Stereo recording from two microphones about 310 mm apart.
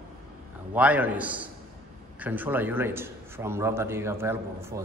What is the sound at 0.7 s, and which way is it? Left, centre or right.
A man's voice, centre.